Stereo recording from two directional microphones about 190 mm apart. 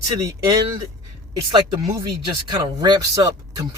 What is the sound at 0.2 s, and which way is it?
Speech, 15° right (ahead or behind).